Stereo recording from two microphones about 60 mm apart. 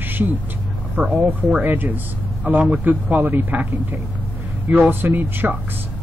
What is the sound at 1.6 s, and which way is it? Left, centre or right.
A man's voice, right.